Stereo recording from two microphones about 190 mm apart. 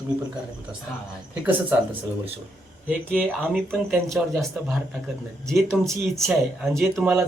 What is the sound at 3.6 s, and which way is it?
A man's voice, centre (ahead or behind).